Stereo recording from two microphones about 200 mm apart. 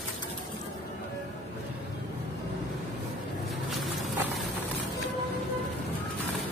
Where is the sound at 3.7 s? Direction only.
Centre (ahead or behind).